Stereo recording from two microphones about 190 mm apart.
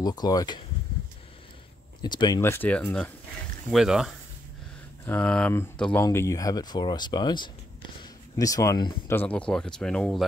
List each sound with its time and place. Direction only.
0.0 s speech: 20° left (ahead or behind)
2.0 s a man's voice: 20° left (ahead or behind)
9.1 s speech: 10° left (ahead or behind)